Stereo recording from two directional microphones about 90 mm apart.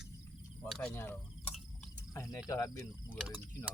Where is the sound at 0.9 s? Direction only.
20° left (ahead or behind).